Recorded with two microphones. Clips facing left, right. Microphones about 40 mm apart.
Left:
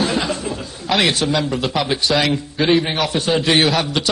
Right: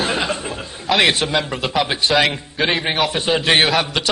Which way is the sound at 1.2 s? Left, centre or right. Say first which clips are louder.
Left 1 dB; centre.